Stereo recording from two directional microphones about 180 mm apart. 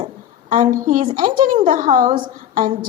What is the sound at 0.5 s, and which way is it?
A woman's voice, 45° right (ahead or behind).